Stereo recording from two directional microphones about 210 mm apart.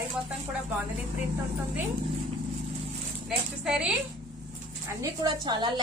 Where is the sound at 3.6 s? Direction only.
5° right (ahead or behind).